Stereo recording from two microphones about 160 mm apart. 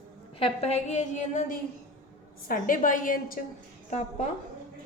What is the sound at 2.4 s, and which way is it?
Speech, 60° left (ahead or behind).